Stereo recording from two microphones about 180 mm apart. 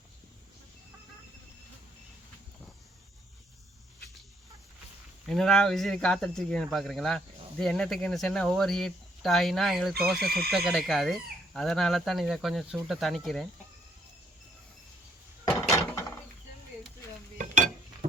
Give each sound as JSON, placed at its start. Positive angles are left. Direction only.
{"t": 5.2, "sound": "speech", "side_deg": 0}
{"t": 10.2, "sound": "speech", "side_deg": -60}
{"t": 10.5, "sound": "speech", "side_deg": 0}
{"t": 15.4, "sound": "mechanisms", "side_deg": 15}